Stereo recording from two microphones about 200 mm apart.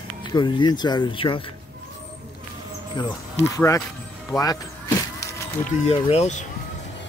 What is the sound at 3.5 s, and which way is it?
Speech, 15° left (ahead or behind).